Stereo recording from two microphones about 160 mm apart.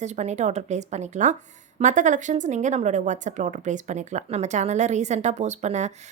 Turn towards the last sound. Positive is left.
turn(degrees=-45)  # may be behind; listen again after turning